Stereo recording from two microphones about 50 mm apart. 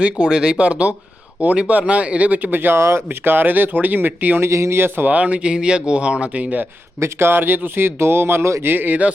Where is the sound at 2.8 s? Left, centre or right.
Right.